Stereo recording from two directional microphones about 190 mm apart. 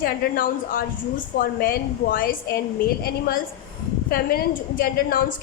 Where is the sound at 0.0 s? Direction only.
50° left (ahead or behind).